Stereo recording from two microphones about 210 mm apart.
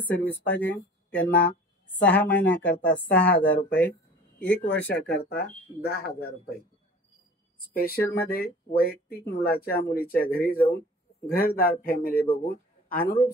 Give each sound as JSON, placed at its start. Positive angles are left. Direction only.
{"t": 0.0, "sound": "speech", "side_deg": 10}
{"t": 4.4, "sound": "speech", "side_deg": 60}
{"t": 7.5, "sound": "speech", "side_deg": 45}